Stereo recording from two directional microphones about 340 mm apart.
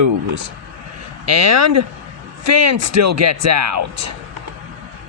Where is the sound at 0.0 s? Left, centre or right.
Right.